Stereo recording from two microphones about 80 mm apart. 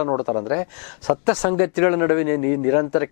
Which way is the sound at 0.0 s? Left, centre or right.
Left.